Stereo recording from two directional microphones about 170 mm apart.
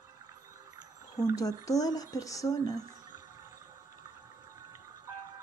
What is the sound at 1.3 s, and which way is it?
Speech, 20° left (ahead or behind).